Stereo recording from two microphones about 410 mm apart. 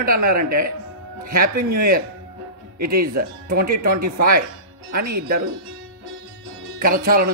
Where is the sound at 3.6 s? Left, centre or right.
Right.